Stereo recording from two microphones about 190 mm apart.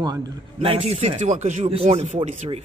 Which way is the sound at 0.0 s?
25° right (ahead or behind).